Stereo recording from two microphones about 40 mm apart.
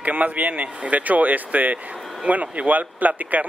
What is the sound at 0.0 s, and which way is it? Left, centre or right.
Speech, right.